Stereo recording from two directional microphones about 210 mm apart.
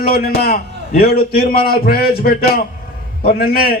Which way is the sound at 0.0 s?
45° left (ahead or behind).